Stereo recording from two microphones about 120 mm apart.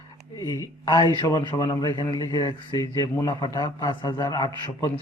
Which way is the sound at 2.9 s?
25° left (ahead or behind).